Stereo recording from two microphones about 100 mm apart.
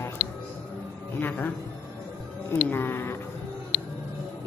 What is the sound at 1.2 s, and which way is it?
Speech, 20° left (ahead or behind).